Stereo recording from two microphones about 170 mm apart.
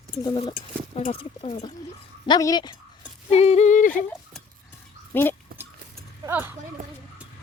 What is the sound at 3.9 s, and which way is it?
Speech, 5° left (ahead or behind).